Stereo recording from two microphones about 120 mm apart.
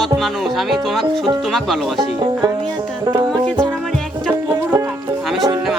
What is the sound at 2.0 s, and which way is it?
Speech, 35° right (ahead or behind).